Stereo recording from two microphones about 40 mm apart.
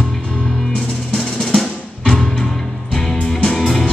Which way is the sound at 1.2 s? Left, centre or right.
Centre.